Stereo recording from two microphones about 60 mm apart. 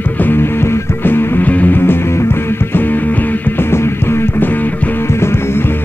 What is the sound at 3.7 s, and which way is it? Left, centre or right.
Music, left.